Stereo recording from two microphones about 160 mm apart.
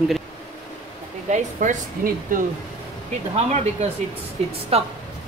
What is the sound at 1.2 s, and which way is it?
Speech, 50° right (ahead or behind).